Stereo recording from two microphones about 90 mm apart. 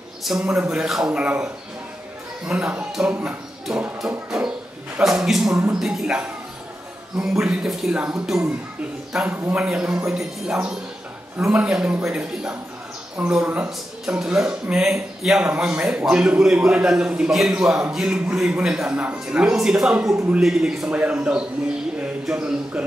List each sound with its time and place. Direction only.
0.2 s a man's voice: 5° right (ahead or behind); by 9.6 s 20° right (ahead or behind)
9.6 s a man's voice: 5° right (ahead or behind)
11.6 s a man's voice: 10° right (ahead or behind)
15.4 s a man's voice: 20° right (ahead or behind)